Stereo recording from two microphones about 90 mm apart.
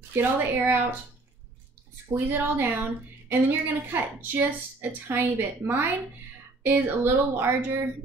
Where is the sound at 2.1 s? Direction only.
25° right (ahead or behind).